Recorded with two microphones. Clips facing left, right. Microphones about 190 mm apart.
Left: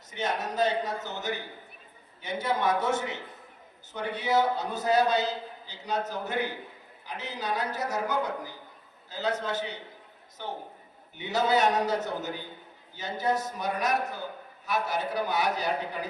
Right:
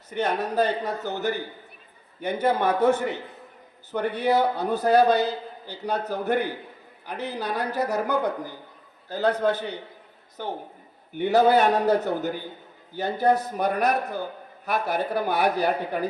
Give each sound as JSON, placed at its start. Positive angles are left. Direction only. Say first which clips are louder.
{"t": 0.1, "sound": "a man's voice", "louder": "right 6 dB", "side_deg": -60}
{"t": 11.2, "sound": "a man's voice", "louder": "right 7 dB", "side_deg": -60}